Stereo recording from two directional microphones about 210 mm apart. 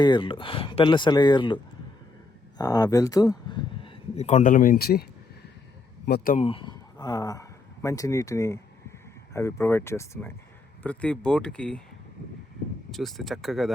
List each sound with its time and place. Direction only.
0.0 s speech: 25° left (ahead or behind)
2.6 s speech: 20° left (ahead or behind); by 5.0 s 45° left (ahead or behind)
6.1 s speech: 45° left (ahead or behind)
6.4 s speech: 25° left (ahead or behind); by 11.8 s 5° left (ahead or behind)
12.9 s speech: centre (ahead or behind)